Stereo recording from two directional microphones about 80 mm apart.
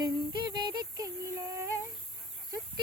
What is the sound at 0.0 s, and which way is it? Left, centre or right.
Music, right.